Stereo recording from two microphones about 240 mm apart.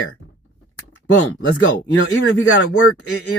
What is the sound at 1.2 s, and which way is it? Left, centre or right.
Speech, left.